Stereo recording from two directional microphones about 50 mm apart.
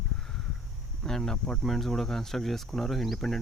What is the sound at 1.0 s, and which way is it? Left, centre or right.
Speech, centre.